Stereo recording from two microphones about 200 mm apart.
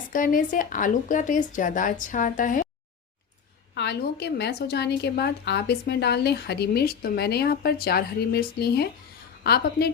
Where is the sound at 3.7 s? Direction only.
55° left (ahead or behind).